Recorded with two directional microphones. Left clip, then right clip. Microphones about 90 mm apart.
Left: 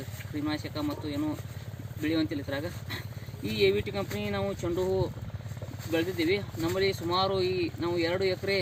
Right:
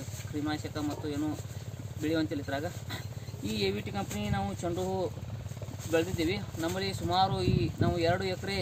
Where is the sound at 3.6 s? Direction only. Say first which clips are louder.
Left 8 dB; 15° right (ahead or behind).